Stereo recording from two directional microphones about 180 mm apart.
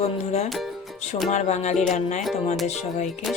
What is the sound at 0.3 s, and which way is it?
Music, 35° left (ahead or behind).